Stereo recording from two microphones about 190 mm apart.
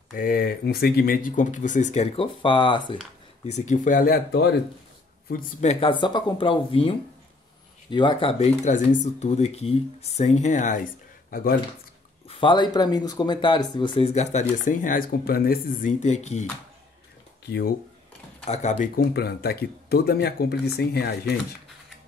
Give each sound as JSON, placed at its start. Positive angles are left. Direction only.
{"t": 0.1, "sound": "speech", "side_deg": 50}
{"t": 2.4, "sound": "speech", "side_deg": 25}
{"t": 3.5, "sound": "speech", "side_deg": 40}
{"t": 5.3, "sound": "speech", "side_deg": 35}
{"t": 12.3, "sound": "speech", "side_deg": 25}
{"t": 17.5, "sound": "speech", "side_deg": 60}
{"t": 18.4, "sound": "speech", "side_deg": 35}